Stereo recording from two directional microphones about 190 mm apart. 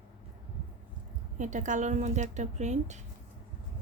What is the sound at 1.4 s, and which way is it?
Speech, 40° right (ahead or behind).